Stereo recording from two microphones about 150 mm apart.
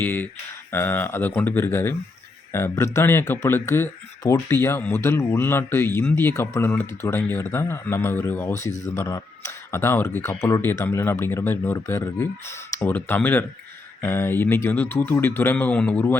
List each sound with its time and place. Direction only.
0.0 s speech: 15° left (ahead or behind)